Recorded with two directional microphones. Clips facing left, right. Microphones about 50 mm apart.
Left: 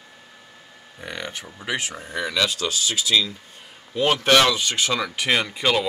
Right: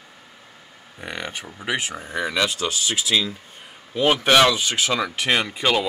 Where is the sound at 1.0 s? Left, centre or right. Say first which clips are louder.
Right 1 dB; right.